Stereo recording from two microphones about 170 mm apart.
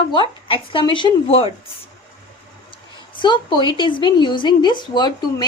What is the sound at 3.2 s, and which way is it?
Speech, 25° left (ahead or behind).